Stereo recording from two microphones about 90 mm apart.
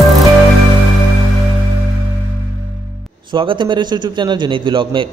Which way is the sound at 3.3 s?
65° right (ahead or behind).